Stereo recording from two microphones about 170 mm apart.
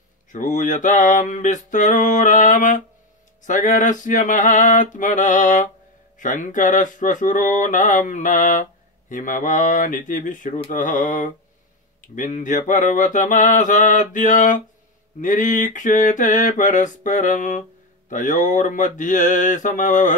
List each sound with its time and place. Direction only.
0.3 s mantra: 45° left (ahead or behind)